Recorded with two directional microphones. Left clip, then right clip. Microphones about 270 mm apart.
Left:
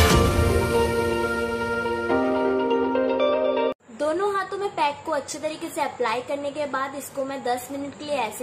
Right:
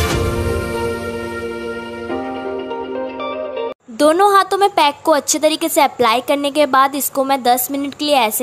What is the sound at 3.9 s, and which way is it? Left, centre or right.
A woman's voice, right.